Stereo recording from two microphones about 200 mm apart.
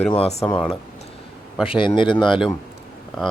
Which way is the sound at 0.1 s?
30° left (ahead or behind).